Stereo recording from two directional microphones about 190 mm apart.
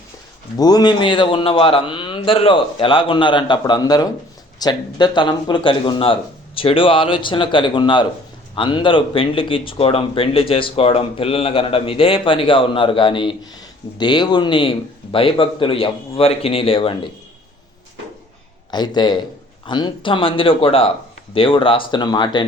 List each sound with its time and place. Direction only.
0.5 s speech: 20° left (ahead or behind)
18.7 s speech: 20° left (ahead or behind)